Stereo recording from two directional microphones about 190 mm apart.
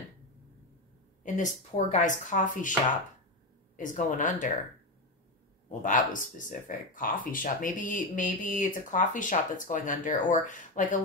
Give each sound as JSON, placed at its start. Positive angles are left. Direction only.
{"t": 1.2, "sound": "speech", "side_deg": 40}
{"t": 3.7, "sound": "speech", "side_deg": 45}
{"t": 5.7, "sound": "speech", "side_deg": 45}